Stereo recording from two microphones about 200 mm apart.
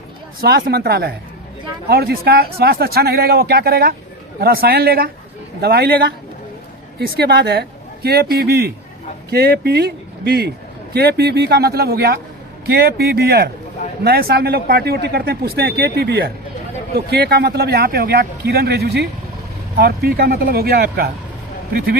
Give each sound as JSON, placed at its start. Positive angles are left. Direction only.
{"t": 0.4, "sound": "speech", "side_deg": -50}